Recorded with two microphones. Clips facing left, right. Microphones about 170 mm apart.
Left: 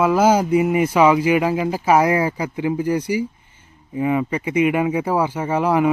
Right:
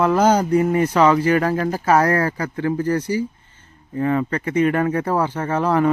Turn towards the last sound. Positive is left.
turn(degrees=10)  # may be behind; listen again after turning